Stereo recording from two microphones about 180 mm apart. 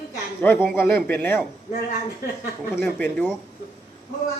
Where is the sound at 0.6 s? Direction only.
15° left (ahead or behind).